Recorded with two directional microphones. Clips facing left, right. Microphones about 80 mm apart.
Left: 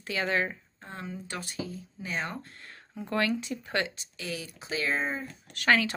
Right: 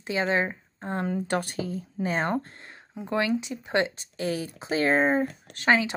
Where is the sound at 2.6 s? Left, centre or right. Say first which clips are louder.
Right 2 dB; right.